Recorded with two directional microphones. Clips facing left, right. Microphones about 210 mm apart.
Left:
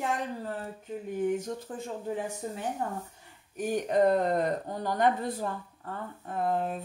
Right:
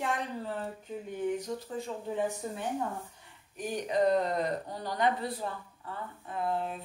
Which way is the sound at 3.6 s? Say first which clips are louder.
Left 4 dB; 50° left (ahead or behind).